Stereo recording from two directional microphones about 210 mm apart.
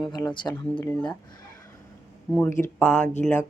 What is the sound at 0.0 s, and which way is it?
Speech, 20° left (ahead or behind).